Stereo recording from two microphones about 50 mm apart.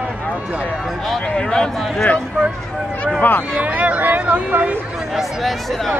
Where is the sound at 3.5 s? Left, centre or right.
Right.